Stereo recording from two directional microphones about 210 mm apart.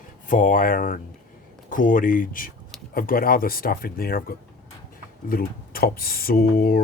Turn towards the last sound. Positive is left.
turn(degrees=45)  # may be behind; listen again after turning